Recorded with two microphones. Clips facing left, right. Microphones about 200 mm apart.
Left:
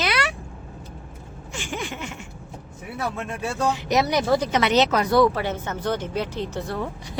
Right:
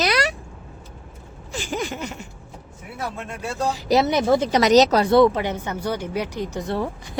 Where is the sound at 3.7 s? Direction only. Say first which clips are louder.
Right 6 dB; 30° right (ahead or behind).